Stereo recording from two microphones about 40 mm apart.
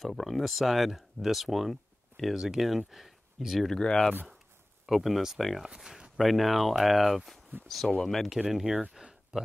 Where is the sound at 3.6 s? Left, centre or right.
Centre.